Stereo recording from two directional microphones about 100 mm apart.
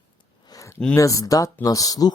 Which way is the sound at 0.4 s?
35° left (ahead or behind).